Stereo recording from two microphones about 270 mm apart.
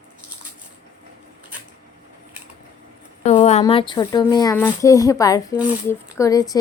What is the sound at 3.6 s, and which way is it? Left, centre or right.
Speech, centre.